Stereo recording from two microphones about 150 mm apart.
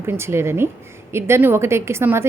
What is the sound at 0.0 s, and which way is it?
A woman's voice, 15° right (ahead or behind).